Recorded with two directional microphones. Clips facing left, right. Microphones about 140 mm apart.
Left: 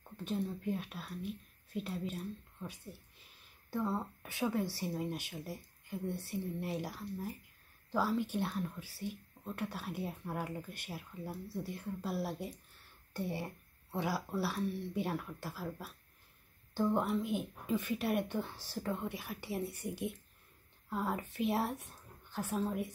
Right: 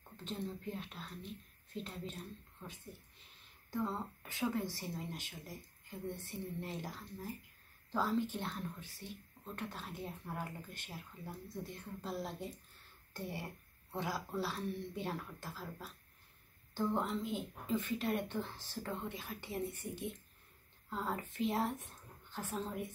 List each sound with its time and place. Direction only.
0.2 s speech: 10° left (ahead or behind)
4.2 s speech: 15° left (ahead or behind)